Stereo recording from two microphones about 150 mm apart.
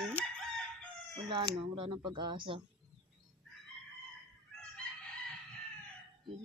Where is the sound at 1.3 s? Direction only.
35° right (ahead or behind).